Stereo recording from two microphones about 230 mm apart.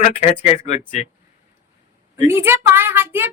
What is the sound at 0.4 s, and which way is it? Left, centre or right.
Speech, left.